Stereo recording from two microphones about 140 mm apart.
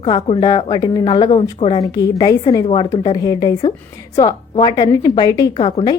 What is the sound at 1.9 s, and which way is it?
A woman's voice, 25° left (ahead or behind).